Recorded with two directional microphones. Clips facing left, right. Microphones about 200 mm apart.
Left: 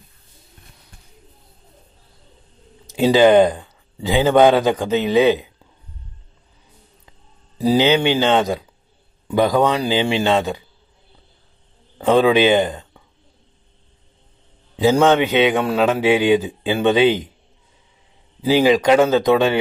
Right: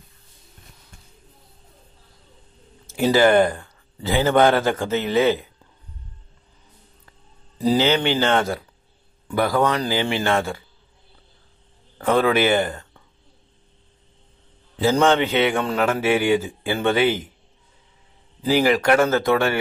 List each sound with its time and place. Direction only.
2.9 s a man's voice: 15° left (ahead or behind)
7.1 s a man's voice: 15° left (ahead or behind)
12.1 s a man's voice: 15° left (ahead or behind)
14.8 s a man's voice: 15° left (ahead or behind)
18.4 s a man's voice: 15° left (ahead or behind)